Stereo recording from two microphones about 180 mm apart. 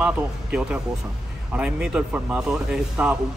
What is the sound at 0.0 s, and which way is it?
A man's voice, 5° right (ahead or behind).